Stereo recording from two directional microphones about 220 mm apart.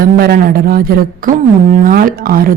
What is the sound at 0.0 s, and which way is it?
A woman's voice, 45° right (ahead or behind).